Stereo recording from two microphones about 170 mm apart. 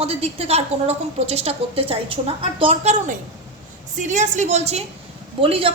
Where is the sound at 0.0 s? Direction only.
35° right (ahead or behind).